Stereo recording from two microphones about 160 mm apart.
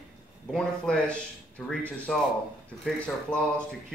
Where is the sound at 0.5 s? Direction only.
5° left (ahead or behind).